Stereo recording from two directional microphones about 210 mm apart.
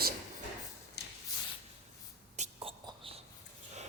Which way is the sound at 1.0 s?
50° left (ahead or behind).